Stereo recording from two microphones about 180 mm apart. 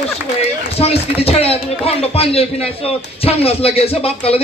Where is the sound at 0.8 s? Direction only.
35° left (ahead or behind).